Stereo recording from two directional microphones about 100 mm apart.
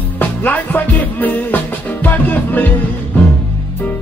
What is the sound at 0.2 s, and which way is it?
Music, 15° left (ahead or behind).